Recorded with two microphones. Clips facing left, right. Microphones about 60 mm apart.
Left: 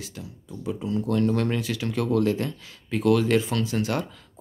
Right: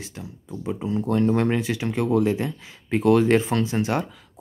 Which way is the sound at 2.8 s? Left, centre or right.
Right.